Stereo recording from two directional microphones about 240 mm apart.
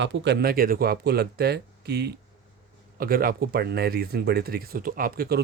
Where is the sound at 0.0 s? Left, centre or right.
Right.